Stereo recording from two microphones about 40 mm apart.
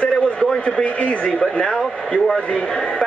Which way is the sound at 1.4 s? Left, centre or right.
Left.